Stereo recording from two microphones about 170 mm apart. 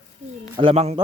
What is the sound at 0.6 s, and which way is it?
Speech, 35° right (ahead or behind).